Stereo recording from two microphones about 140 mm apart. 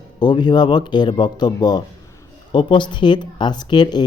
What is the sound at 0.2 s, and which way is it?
Speech, 30° left (ahead or behind).